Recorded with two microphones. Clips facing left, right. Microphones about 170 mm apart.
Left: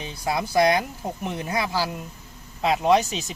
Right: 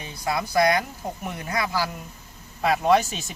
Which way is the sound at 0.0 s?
25° left (ahead or behind).